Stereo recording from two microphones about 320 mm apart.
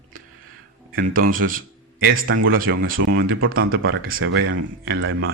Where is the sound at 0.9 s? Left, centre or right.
Right.